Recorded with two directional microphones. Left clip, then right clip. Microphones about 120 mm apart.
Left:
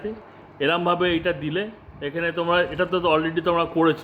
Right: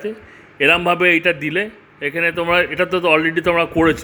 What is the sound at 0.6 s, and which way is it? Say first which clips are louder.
A man's voice: right 7 dB; 55° right (ahead or behind).